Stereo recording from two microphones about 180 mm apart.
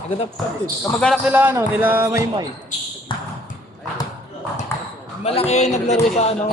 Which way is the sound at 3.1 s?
25° left (ahead or behind).